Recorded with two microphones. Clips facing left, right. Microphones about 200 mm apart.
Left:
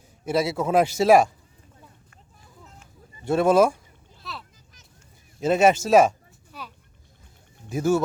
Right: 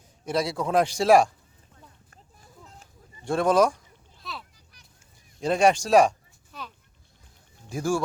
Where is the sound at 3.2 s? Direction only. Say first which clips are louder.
Left 3 dB; 5° left (ahead or behind).